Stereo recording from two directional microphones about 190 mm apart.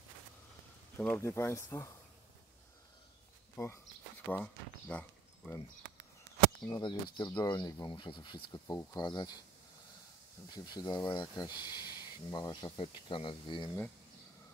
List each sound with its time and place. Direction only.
0.9 s speech: 10° left (ahead or behind)
3.5 s speech: 15° left (ahead or behind)
6.7 s speech: 25° left (ahead or behind)
10.5 s speech: 20° left (ahead or behind)